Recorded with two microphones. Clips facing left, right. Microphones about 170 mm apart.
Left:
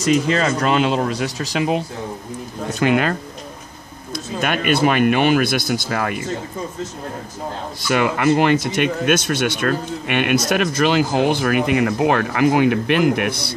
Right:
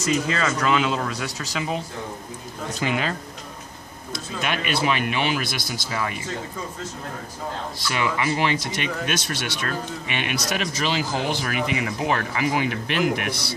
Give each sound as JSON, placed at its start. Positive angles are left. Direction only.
{"t": 0.4, "sound": "speech", "side_deg": 35}
{"t": 0.7, "sound": "speech", "side_deg": 55}
{"t": 2.8, "sound": "speech", "side_deg": 55}
{"t": 4.4, "sound": "speech", "side_deg": 50}
{"t": 7.9, "sound": "speech", "side_deg": 55}